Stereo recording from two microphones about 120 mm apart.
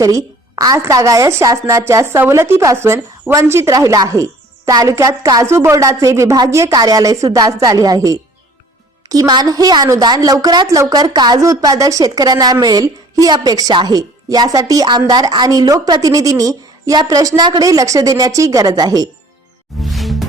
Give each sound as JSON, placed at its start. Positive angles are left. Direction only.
{"t": 0.0, "sound": "a woman's voice", "side_deg": -30}
{"t": 19.8, "sound": "music", "side_deg": 0}